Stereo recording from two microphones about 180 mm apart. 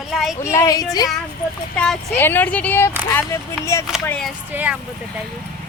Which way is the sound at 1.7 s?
5° left (ahead or behind).